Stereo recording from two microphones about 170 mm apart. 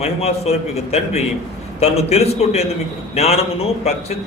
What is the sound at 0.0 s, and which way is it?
A man's voice, 40° left (ahead or behind).